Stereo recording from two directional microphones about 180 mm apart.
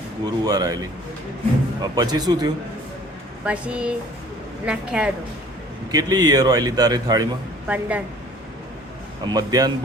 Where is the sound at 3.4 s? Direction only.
5° right (ahead or behind).